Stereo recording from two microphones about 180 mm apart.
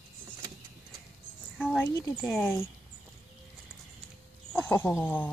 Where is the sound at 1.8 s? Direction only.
15° left (ahead or behind).